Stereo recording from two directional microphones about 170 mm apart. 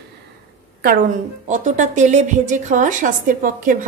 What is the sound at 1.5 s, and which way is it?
A woman's voice, 45° right (ahead or behind).